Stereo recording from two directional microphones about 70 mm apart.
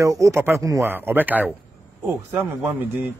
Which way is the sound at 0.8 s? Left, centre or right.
Right.